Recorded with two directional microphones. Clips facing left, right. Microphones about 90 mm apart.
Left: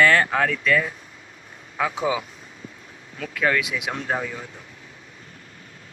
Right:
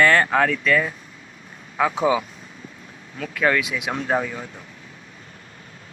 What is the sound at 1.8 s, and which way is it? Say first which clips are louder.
Speech: right 4 dB; 40° right (ahead or behind).